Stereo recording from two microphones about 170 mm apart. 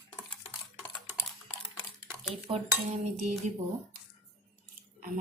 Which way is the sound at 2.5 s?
40° right (ahead or behind).